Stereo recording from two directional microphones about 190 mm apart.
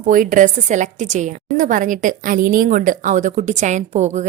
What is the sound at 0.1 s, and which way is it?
A woman's voice, 45° right (ahead or behind).